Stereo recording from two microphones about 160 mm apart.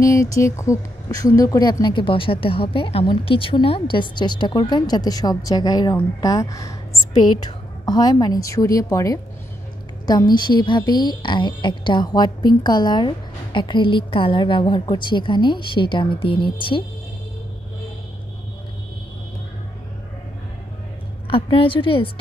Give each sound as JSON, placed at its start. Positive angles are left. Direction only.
{"t": 0.0, "sound": "a woman's voice", "side_deg": 20}
{"t": 21.3, "sound": "a woman's voice", "side_deg": 35}